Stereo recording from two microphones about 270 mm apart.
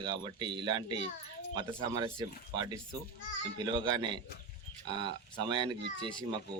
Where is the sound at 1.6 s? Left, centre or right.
Centre.